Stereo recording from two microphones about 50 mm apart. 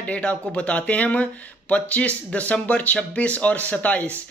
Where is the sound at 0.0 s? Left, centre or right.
Left.